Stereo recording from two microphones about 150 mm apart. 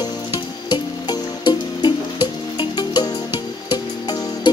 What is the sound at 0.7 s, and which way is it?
Music, 30° left (ahead or behind).